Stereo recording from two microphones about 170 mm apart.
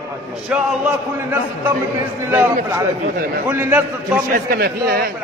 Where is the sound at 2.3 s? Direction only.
10° right (ahead or behind).